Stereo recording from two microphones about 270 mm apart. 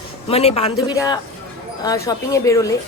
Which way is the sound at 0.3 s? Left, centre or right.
Left.